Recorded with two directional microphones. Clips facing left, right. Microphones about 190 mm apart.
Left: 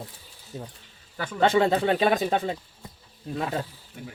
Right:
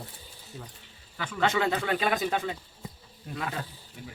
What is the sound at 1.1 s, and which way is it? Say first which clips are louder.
Speech: left 6 dB; 35° left (ahead or behind).